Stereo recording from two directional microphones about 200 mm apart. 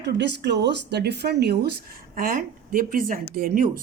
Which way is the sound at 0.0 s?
60° right (ahead or behind).